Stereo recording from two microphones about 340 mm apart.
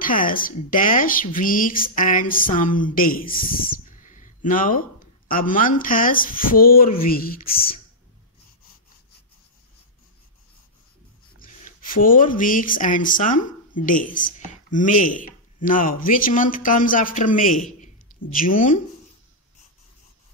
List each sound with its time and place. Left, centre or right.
0.0 s speech: left
3.8 s a sound: left
5.3 s speech: left
11.3 s speech: left